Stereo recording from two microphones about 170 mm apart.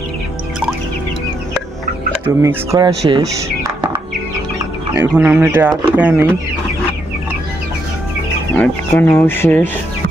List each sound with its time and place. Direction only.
2.2 s speech: 20° right (ahead or behind)
3.1 s music: 25° right (ahead or behind)
4.9 s speech: 10° right (ahead or behind)
8.5 s speech: 15° left (ahead or behind)